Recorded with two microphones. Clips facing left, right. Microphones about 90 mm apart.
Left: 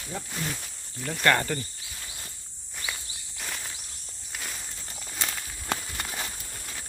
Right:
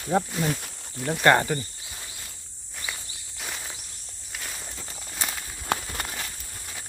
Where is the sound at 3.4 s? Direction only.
10° right (ahead or behind).